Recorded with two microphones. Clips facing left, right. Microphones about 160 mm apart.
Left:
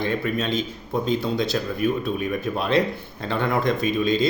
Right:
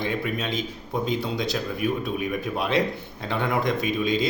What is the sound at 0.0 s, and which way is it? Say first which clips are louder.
A man's voice: left 3 dB; 15° right (ahead or behind).